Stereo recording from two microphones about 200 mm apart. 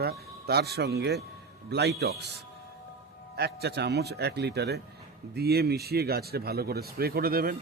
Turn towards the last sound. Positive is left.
turn(degrees=-45)  # may be behind; listen again after turning